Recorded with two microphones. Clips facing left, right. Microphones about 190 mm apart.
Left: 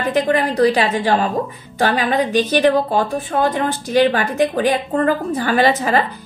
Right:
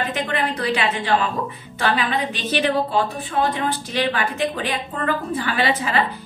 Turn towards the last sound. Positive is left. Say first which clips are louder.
# left 5 dB
turn(degrees=45)  # may be behind; listen again after turning